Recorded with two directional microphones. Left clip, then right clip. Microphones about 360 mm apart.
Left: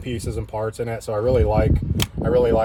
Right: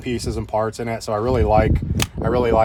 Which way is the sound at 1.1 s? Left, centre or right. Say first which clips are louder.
Even; centre.